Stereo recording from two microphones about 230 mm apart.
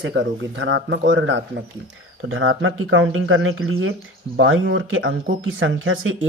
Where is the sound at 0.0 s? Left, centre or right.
Right.